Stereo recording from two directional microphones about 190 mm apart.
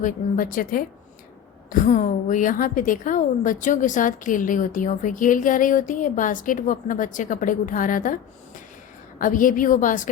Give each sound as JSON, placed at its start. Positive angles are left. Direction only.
{"t": 0.0, "sound": "a woman's voice", "side_deg": 45}
{"t": 9.1, "sound": "a woman's voice", "side_deg": 45}